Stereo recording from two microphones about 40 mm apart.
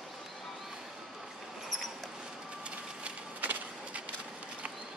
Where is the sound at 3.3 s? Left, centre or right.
Right.